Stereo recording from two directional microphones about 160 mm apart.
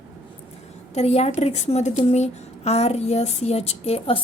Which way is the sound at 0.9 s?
40° left (ahead or behind).